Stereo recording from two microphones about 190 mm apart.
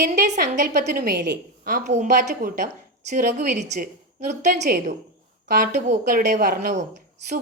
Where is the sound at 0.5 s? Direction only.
40° right (ahead or behind).